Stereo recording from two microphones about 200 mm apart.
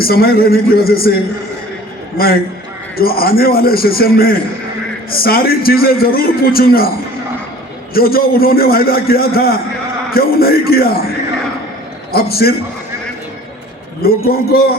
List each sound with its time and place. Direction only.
0.0 s a man's voice: 50° left (ahead or behind)
2.1 s a man's voice: 50° left (ahead or behind)
7.9 s a man's voice: 50° left (ahead or behind)
12.1 s a man's voice: 50° left (ahead or behind)
14.3 s a man's voice: 50° left (ahead or behind)